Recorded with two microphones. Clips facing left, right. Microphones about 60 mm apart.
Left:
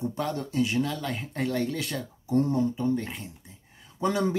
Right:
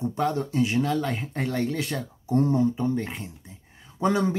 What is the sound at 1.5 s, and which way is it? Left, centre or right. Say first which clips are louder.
Speech: right 3 dB; centre.